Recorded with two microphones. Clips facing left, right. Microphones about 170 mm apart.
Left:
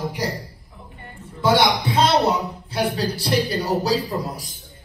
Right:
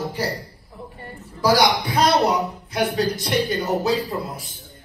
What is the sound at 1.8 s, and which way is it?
A woman's voice, 25° left (ahead or behind).